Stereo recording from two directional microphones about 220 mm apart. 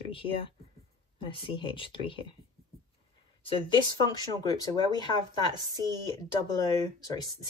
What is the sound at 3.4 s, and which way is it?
Speech, 25° left (ahead or behind).